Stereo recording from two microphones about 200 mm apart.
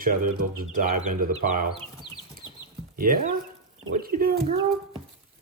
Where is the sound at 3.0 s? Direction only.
45° right (ahead or behind).